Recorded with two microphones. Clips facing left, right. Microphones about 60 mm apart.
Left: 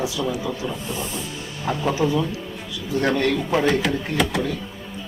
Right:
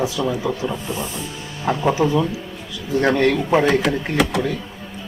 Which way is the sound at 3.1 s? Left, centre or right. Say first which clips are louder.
Right 5 dB; right.